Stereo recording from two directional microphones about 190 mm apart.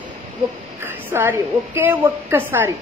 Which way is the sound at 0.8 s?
10° right (ahead or behind).